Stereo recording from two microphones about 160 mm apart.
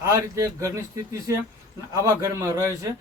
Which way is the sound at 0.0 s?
20° right (ahead or behind).